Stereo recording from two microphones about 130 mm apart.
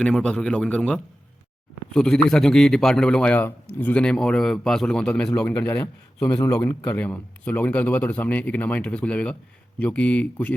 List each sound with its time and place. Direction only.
0.0 s a man's voice: 10° left (ahead or behind)